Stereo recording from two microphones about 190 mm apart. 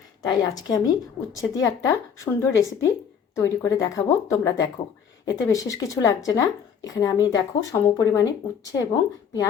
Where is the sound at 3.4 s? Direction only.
20° left (ahead or behind).